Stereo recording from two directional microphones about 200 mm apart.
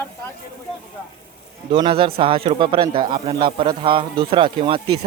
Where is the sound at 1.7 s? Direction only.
25° right (ahead or behind).